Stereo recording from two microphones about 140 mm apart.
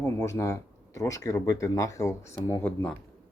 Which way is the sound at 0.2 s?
20° left (ahead or behind).